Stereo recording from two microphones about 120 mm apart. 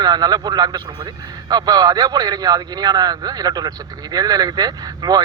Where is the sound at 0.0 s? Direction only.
35° right (ahead or behind).